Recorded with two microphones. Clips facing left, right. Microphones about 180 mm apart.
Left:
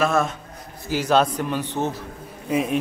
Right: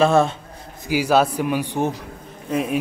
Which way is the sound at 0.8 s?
10° right (ahead or behind).